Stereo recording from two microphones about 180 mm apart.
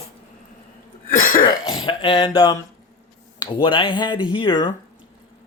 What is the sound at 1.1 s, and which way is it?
Cough, 50° left (ahead or behind).